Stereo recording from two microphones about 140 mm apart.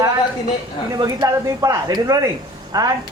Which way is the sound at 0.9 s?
25° right (ahead or behind).